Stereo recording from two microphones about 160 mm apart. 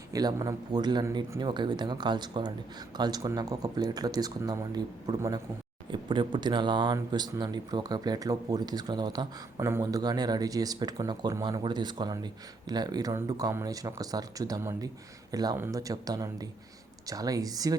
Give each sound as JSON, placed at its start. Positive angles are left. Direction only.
{"t": 0.1, "sound": "speech", "side_deg": -25}